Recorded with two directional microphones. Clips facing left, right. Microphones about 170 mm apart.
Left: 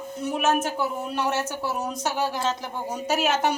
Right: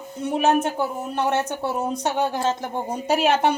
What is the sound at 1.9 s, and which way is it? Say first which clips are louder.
A woman's voice: right 3 dB; 55° right (ahead or behind).